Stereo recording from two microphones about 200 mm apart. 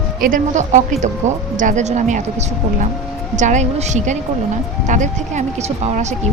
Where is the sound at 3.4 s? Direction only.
35° right (ahead or behind).